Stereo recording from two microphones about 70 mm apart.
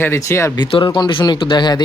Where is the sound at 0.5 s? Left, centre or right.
Left.